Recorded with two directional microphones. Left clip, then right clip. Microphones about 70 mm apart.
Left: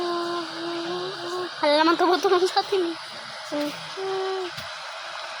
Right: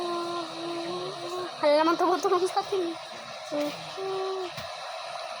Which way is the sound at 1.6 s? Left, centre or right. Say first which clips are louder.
Left 2 dB; centre.